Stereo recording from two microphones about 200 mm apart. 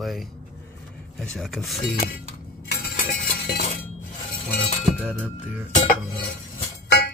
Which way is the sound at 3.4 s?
45° left (ahead or behind).